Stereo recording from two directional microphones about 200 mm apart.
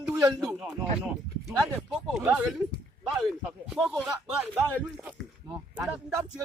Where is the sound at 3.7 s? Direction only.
Centre (ahead or behind).